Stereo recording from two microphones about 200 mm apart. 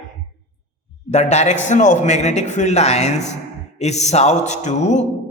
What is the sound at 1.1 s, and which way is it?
A man's voice, 35° left (ahead or behind).